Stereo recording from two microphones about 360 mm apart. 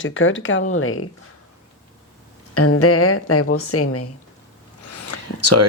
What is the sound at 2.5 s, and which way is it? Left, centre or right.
Speech, left.